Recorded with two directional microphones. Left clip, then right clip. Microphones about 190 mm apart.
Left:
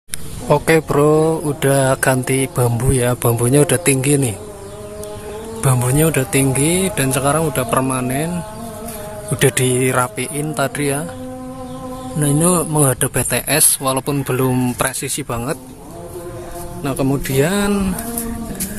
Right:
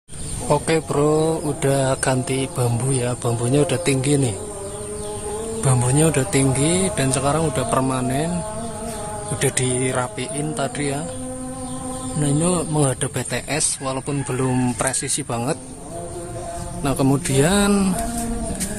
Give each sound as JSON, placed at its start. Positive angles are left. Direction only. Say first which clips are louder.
{"t": 0.5, "sound": "speech", "louder": "left 6 dB", "side_deg": 20}
{"t": 5.6, "sound": "speech", "louder": "left 3 dB", "side_deg": 15}
{"t": 9.4, "sound": "a man's voice", "louder": "left 7 dB", "side_deg": 20}
{"t": 12.2, "sound": "speech", "louder": "left 5 dB", "side_deg": 15}
{"t": 16.8, "sound": "speech", "louder": "left 1 dB", "side_deg": 0}